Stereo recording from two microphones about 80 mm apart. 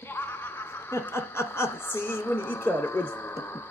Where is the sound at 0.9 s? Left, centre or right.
Left.